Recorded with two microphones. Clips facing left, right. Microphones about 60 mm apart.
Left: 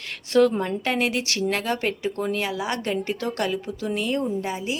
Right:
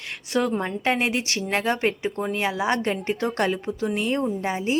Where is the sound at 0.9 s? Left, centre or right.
Right.